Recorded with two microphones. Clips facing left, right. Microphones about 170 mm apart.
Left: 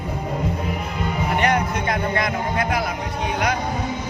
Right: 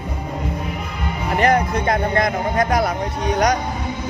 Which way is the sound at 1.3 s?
35° right (ahead or behind).